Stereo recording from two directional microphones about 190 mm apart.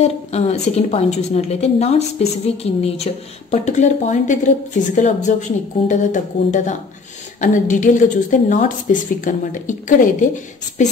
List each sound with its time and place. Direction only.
0.0 s a woman's voice: 35° left (ahead or behind)